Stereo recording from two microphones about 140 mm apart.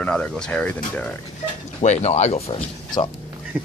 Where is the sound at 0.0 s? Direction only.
5° left (ahead or behind).